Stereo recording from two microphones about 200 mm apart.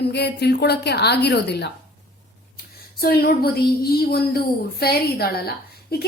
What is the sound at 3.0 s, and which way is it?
A woman's voice, 50° left (ahead or behind).